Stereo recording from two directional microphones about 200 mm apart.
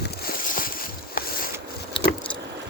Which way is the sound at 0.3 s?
45° left (ahead or behind).